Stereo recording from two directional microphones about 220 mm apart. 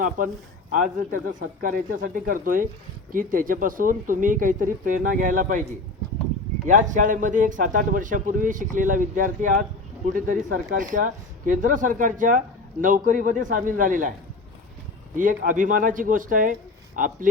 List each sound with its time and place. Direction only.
0.7 s speech: 35° right (ahead or behind)
6.7 s speech: 35° right (ahead or behind)
15.1 s speech: 35° right (ahead or behind)